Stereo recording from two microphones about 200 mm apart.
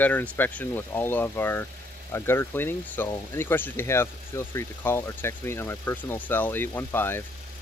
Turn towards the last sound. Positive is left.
turn(degrees=10)  # may be behind; listen again after turning